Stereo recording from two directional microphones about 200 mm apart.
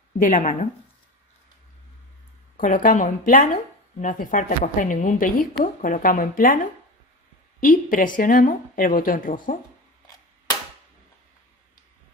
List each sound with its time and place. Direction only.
0.2 s a woman's voice: 40° left (ahead or behind)
2.5 s a woman's voice: 45° left (ahead or behind)